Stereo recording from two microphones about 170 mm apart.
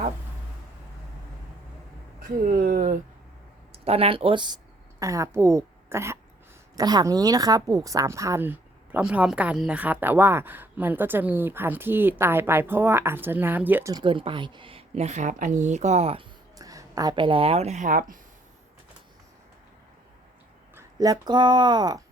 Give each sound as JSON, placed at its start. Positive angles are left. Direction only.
{"t": 2.5, "sound": "speech", "side_deg": -60}
{"t": 3.7, "sound": "a woman's voice", "side_deg": -35}
{"t": 13.9, "sound": "a woman's voice", "side_deg": -30}
{"t": 16.6, "sound": "speech", "side_deg": -20}
{"t": 20.7, "sound": "speech", "side_deg": -20}